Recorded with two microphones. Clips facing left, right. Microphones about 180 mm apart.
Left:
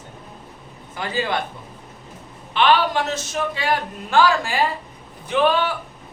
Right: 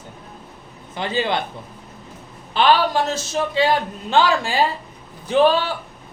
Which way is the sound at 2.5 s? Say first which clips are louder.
Right 1 dB; 35° right (ahead or behind).